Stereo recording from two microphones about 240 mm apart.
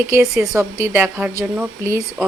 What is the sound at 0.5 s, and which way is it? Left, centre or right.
A woman's voice, centre.